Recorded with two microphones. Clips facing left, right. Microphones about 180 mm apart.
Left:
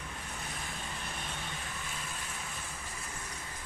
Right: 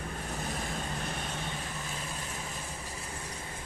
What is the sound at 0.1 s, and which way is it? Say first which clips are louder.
Vehicle: right 7 dB; 45° right (ahead or behind).